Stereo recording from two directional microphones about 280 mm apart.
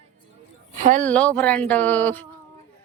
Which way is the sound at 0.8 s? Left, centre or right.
Right.